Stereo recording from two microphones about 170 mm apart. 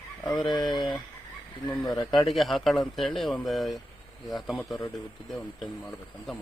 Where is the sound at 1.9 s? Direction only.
25° left (ahead or behind).